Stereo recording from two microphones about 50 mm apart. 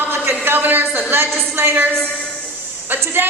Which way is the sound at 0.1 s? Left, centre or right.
Right.